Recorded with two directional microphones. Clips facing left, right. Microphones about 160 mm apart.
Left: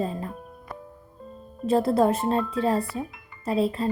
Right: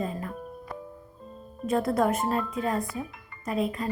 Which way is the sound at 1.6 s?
30° left (ahead or behind).